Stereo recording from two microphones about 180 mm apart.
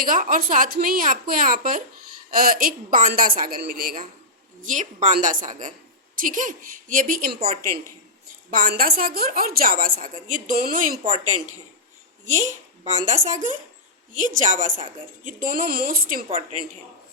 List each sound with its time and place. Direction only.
0.0 s a child's voice: 50° right (ahead or behind)
12.2 s a woman's voice: 40° right (ahead or behind)